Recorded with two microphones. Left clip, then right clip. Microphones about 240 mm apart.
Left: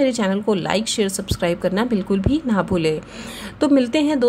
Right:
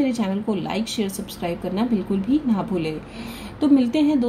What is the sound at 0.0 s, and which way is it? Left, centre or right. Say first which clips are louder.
A woman's voice: left 5 dB; left.